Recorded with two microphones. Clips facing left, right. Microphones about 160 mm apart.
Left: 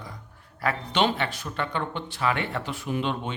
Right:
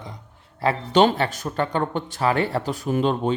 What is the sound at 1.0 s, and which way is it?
A man's voice, 40° right (ahead or behind).